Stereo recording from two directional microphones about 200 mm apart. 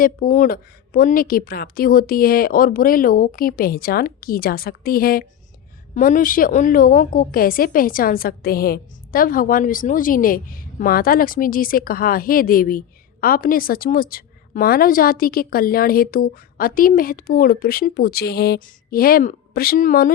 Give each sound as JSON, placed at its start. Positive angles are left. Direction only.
{"t": 0.0, "sound": "a woman's voice", "side_deg": 40}